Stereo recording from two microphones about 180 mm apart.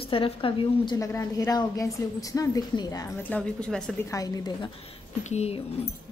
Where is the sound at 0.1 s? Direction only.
30° left (ahead or behind).